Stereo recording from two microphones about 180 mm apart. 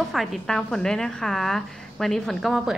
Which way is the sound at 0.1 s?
Centre (ahead or behind).